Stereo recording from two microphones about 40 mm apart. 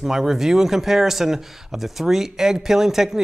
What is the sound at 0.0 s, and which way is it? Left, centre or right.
Speech, centre.